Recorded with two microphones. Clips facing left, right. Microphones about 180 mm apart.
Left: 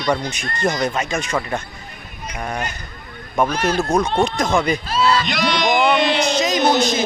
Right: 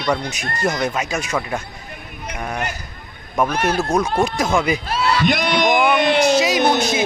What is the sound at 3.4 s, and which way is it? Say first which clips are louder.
Speech: even; 55° right (ahead or behind).